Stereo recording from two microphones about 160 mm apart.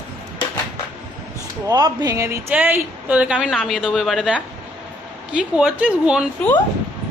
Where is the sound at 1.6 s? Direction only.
25° right (ahead or behind); by 6.3 s 5° right (ahead or behind).